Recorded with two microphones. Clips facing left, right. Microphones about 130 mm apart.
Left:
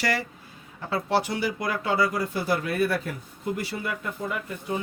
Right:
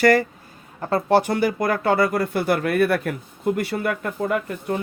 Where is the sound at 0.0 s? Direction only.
50° right (ahead or behind).